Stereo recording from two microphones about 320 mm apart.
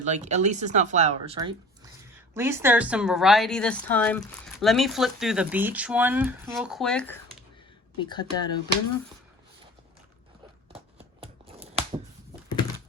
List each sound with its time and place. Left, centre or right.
0.0 s speech: right; by 7.2 s centre
7.9 s speech: centre
10.7 s a sound: centre